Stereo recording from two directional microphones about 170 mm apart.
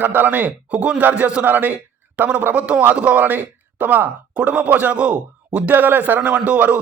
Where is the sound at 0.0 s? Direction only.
10° right (ahead or behind).